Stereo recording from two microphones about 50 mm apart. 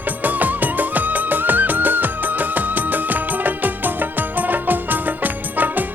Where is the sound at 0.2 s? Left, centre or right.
Right.